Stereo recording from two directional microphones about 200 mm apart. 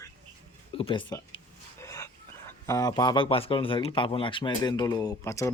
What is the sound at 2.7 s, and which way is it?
Speech, 15° left (ahead or behind).